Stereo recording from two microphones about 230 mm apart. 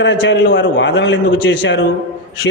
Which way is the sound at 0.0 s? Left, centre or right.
Left.